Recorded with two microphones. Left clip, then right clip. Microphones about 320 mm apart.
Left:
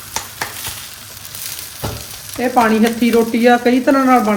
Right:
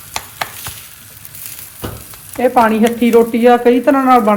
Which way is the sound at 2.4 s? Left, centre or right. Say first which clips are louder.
Right 3 dB; centre.